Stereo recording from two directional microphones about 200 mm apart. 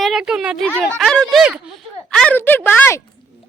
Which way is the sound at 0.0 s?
Centre (ahead or behind).